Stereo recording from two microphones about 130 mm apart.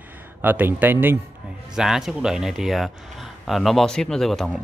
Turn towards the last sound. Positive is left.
turn(degrees=5)  # may be behind; listen again after turning